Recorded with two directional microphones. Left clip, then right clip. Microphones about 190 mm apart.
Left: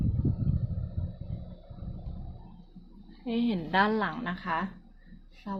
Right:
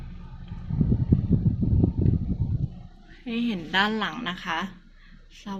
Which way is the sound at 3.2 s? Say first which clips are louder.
Right 1 dB; 15° left (ahead or behind).